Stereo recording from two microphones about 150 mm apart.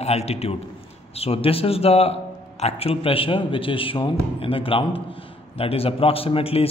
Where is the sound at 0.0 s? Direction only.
45° left (ahead or behind).